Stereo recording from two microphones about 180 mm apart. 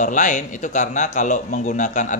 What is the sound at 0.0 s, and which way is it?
A man's voice, 45° left (ahead or behind).